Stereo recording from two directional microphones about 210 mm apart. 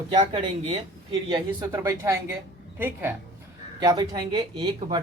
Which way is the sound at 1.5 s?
15° right (ahead or behind).